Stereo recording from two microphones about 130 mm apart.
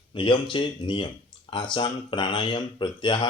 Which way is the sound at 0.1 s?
40° left (ahead or behind).